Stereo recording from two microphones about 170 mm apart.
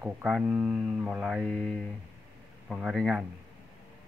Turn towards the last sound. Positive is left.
turn(degrees=0)  # may be behind; listen again after turning